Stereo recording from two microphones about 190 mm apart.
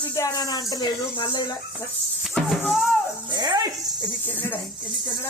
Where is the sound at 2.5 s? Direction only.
Centre (ahead or behind).